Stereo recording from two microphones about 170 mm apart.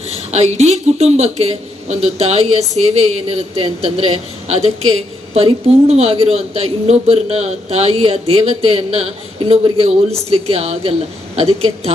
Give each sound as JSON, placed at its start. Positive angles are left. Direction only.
{"t": 0.1, "sound": "a man's voice", "side_deg": -40}